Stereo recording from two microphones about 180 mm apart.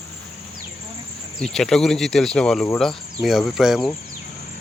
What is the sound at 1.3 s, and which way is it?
Speech, centre (ahead or behind).